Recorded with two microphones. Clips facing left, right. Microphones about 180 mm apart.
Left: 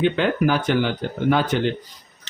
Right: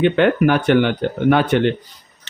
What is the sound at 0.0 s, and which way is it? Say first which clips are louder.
Speech: right 5 dB; 60° right (ahead or behind).